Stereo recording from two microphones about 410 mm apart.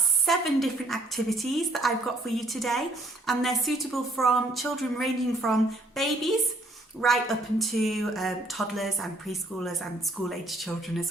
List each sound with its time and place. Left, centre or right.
0.3 s a woman's voice: centre